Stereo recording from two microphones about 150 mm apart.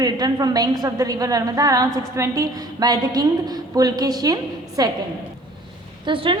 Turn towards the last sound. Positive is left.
turn(degrees=-35)  # may be behind; listen again after turning